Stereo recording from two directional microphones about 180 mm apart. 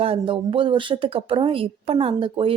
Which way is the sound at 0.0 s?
30° right (ahead or behind).